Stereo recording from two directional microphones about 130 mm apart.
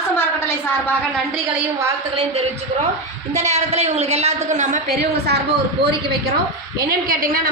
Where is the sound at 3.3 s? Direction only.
60° right (ahead or behind).